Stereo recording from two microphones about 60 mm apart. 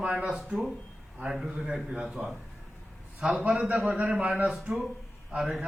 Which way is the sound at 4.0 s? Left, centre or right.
Right.